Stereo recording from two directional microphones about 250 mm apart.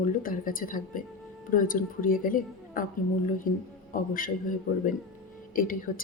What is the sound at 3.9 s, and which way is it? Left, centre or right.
A woman's voice, left.